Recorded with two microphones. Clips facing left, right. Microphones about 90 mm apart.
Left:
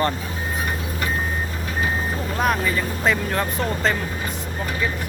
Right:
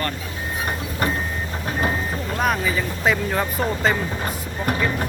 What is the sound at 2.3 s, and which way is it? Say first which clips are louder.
Speech: even; centre (ahead or behind).